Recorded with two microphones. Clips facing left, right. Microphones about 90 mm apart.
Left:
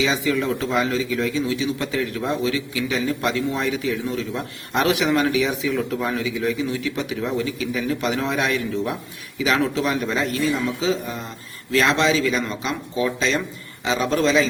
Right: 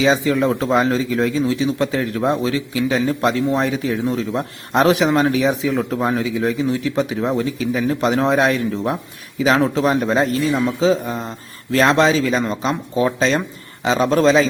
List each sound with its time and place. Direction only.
0.0 s speech: 35° right (ahead or behind)